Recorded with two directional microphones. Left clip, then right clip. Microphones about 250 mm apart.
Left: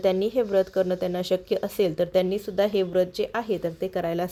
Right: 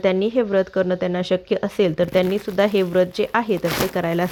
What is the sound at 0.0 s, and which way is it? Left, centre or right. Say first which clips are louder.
A woman's voice: right 4 dB; centre.